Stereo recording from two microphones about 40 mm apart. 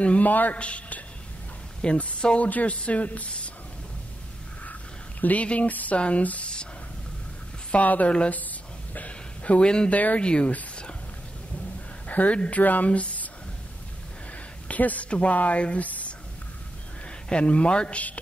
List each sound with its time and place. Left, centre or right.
0.0 s speech: left
0.6 s a man's voice: left
5.2 s speech: left
5.9 s a man's voice: left
7.7 s speech: left
8.3 s a sound: left
9.8 s speech: left
10.2 s a man's voice: left
12.1 s speech: left
14.7 s speech: left
17.3 s a man's voice: left